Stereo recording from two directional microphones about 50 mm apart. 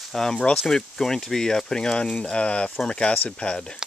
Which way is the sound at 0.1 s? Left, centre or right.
Centre.